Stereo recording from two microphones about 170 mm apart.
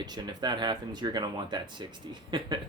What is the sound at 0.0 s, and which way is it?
Speech, 25° right (ahead or behind).